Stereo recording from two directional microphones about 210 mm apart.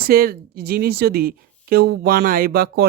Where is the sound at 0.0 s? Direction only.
45° right (ahead or behind).